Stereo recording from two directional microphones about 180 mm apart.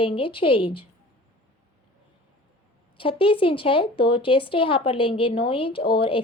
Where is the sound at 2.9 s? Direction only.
30° left (ahead or behind).